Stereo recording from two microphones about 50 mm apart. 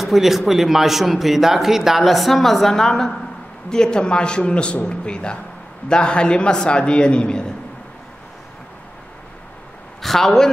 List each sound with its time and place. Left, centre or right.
0.0 s a man's voice: centre
10.0 s a man's voice: centre